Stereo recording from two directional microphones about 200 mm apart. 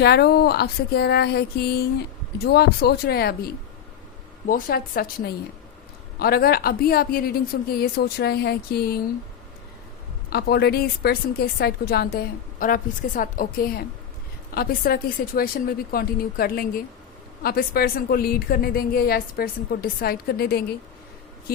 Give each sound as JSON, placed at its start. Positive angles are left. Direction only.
{"t": 0.0, "sound": "a woman's voice", "side_deg": 50}
{"t": 10.2, "sound": "a woman's voice", "side_deg": 50}